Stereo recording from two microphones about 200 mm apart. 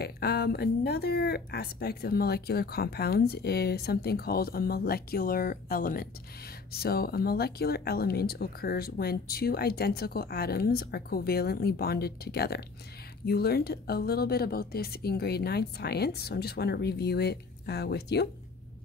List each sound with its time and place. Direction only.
0.0 s a woman's voice: 50° left (ahead or behind)